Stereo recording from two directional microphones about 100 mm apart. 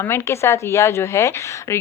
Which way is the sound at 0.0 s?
25° left (ahead or behind).